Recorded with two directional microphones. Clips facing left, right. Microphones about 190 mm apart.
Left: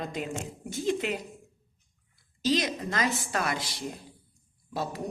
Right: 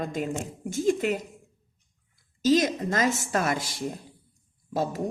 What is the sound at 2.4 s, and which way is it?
A woman's voice, 45° right (ahead or behind).